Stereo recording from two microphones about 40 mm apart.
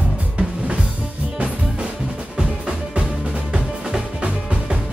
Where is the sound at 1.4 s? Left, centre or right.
Right.